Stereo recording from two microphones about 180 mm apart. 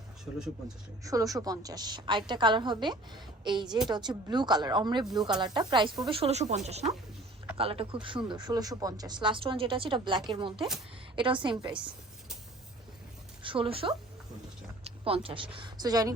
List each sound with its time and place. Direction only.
1.0 s speech: 20° right (ahead or behind)
13.4 s speech: 30° right (ahead or behind)